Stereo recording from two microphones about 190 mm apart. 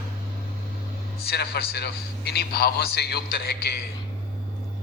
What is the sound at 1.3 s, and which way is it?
A man's voice, 55° left (ahead or behind).